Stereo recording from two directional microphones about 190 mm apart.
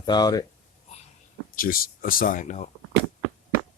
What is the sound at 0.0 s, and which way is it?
Speech, 20° left (ahead or behind).